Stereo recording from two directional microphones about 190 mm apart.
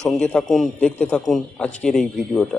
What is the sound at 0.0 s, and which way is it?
Speech, 5° left (ahead or behind).